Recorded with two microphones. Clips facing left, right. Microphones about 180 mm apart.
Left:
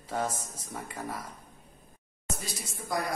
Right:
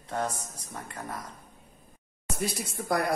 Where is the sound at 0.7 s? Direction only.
Centre (ahead or behind).